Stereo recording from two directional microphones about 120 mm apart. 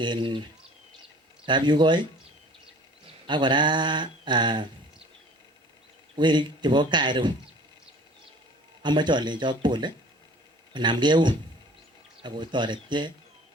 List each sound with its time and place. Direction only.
0.0 s speech: 40° right (ahead or behind)
1.5 s speech: 40° right (ahead or behind)
3.2 s speech: 40° right (ahead or behind)
6.1 s speech: 40° right (ahead or behind)
8.8 s speech: 40° right (ahead or behind)